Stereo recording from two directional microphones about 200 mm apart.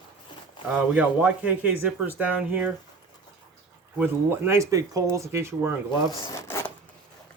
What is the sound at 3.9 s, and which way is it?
Speech, 10° right (ahead or behind).